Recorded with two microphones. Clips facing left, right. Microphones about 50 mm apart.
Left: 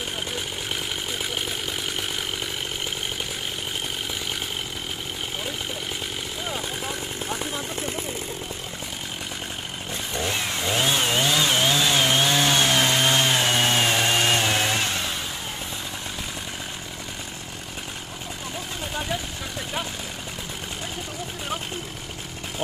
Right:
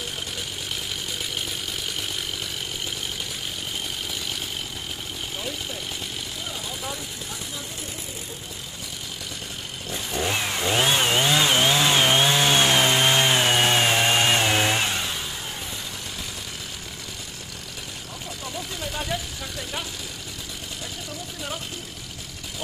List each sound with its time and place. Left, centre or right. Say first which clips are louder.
6.5 s vehicle: left 3 dB; left
10.2 s chainsaw: right 2 dB; centre